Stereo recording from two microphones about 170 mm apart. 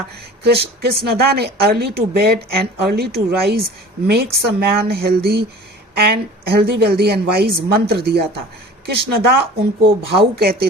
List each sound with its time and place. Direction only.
0.4 s a woman's voice: 70° right (ahead or behind)
6.5 s a woman's voice: 70° right (ahead or behind)